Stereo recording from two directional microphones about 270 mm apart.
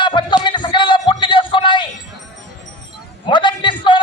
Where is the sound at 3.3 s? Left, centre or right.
Centre.